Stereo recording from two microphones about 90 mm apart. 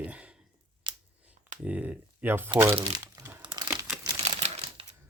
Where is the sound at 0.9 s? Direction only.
60° right (ahead or behind).